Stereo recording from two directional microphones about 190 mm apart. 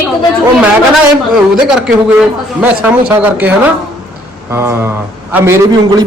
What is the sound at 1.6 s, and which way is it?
A man's voice, 5° right (ahead or behind).